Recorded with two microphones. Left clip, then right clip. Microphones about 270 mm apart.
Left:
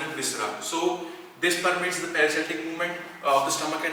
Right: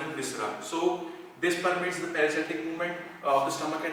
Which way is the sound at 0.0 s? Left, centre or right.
Centre.